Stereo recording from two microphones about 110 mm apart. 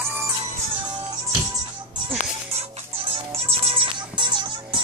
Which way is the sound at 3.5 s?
60° right (ahead or behind).